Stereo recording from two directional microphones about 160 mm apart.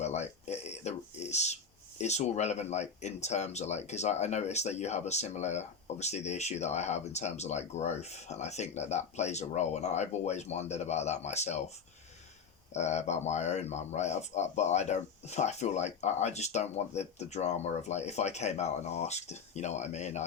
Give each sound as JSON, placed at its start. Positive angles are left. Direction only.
{"t": 0.0, "sound": "a sound", "side_deg": 45}
{"t": 2.0, "sound": "speech", "side_deg": 45}
{"t": 12.7, "sound": "speech", "side_deg": 45}